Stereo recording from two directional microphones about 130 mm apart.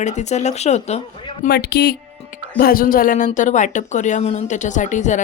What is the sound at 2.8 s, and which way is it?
Speech, 90° left.